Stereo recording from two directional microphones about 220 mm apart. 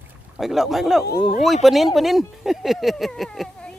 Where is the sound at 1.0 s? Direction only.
45° left (ahead or behind).